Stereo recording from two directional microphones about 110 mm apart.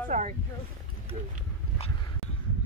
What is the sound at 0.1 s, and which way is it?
Speech, 90° right.